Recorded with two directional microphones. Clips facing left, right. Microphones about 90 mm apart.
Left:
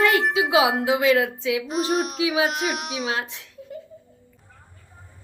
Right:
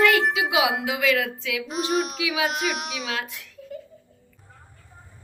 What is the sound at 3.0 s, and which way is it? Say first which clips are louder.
Speech: left 3 dB; 30° left (ahead or behind).